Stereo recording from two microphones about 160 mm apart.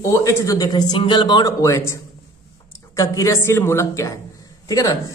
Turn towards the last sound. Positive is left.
turn(degrees=20)  # may be behind; listen again after turning